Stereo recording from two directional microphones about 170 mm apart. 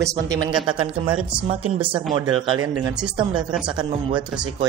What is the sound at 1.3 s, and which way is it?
A man's voice, 35° right (ahead or behind).